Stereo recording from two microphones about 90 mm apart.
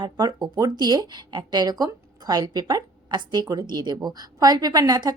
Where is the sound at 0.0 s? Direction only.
55° right (ahead or behind).